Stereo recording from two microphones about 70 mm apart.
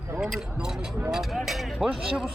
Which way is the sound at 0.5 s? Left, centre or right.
Centre.